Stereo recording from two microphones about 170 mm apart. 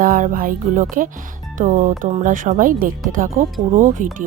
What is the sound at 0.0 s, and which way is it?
Speech, 55° right (ahead or behind).